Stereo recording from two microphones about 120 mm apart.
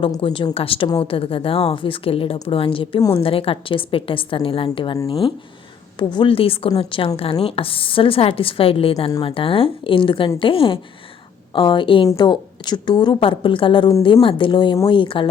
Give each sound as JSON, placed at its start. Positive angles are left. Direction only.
{"t": 0.2, "sound": "a woman's voice", "side_deg": 50}
{"t": 6.0, "sound": "a woman's voice", "side_deg": 40}